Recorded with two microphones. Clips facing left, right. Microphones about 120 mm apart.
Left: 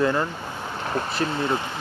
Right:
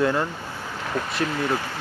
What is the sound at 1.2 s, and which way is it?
Speech, 25° left (ahead or behind).